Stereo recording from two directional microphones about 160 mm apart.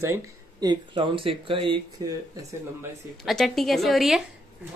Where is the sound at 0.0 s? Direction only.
20° right (ahead or behind).